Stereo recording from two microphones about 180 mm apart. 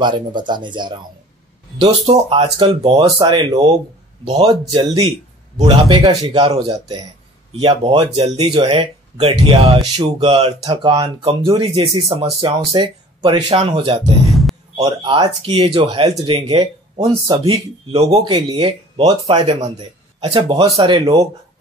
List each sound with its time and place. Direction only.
0.0 s speech: 25° right (ahead or behind)
14.2 s a sound: centre (ahead or behind)
14.8 s speech: 25° right (ahead or behind)